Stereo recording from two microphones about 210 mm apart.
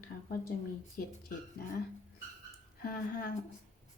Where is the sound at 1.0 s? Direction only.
45° left (ahead or behind).